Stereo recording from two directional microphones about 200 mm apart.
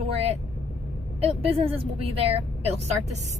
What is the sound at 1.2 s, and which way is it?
A woman's voice, 30° right (ahead or behind).